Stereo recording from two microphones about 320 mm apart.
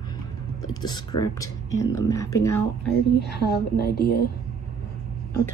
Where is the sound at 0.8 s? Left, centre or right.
Centre.